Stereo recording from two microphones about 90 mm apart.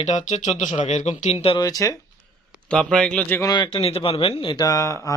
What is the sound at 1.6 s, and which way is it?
Speech, 40° left (ahead or behind).